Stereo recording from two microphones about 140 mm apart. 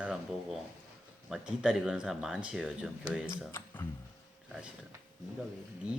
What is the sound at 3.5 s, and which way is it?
Speech, 15° left (ahead or behind).